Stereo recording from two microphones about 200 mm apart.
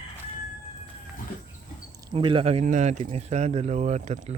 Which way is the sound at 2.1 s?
25° right (ahead or behind).